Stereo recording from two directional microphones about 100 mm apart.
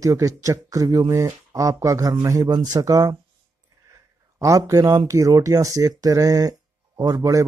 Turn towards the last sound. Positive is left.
turn(degrees=-35)  # may be behind; listen again after turning